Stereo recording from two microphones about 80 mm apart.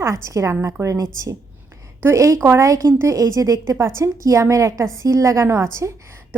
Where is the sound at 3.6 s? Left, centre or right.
Right.